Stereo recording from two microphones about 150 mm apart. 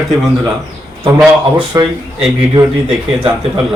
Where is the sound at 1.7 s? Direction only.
25° right (ahead or behind).